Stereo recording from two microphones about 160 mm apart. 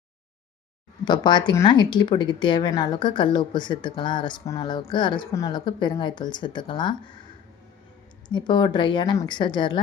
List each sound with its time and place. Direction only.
1.0 s speech: 30° left (ahead or behind)
8.3 s speech: 30° left (ahead or behind)